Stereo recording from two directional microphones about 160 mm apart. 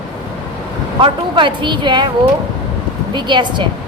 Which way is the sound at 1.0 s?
30° right (ahead or behind).